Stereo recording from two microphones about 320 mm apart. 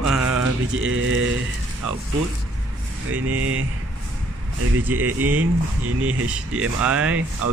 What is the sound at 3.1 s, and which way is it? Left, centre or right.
Speech, right.